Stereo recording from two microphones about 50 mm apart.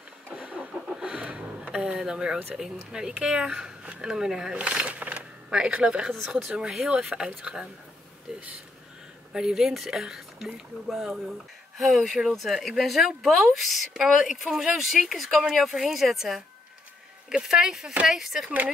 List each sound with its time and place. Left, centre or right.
0.3 s vehicle: right
0.9 s a sound: centre
1.7 s speech: centre
6.1 s speech: centre
6.9 s speech: centre
8.3 s a sound: centre
9.3 s speech: centre